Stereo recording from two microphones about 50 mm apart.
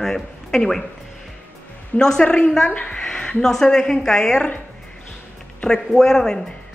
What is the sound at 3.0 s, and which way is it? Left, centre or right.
Speech, centre.